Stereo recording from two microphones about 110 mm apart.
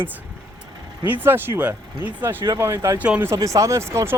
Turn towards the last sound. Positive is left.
turn(degrees=-25)  # may be behind; listen again after turning